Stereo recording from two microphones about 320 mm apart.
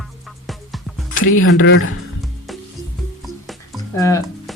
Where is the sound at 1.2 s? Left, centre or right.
Left.